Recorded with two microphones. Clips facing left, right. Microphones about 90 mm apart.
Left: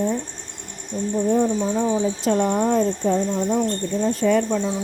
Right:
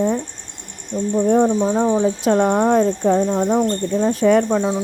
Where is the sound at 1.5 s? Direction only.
40° right (ahead or behind).